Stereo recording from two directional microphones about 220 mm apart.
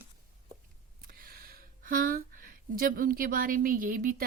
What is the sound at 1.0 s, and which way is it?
Speech, 40° right (ahead or behind).